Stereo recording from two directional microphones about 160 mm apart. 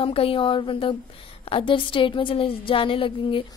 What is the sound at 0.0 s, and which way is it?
A woman's voice, 35° left (ahead or behind).